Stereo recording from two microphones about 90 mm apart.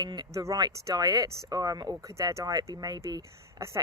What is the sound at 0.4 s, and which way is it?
Speech, 40° right (ahead or behind).